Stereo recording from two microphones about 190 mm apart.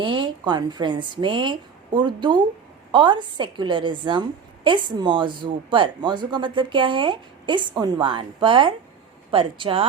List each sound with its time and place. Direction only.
0.0 s a woman's voice: 25° right (ahead or behind)